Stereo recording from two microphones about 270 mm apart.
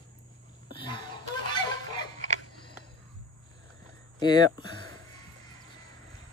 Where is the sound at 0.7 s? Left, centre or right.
Centre.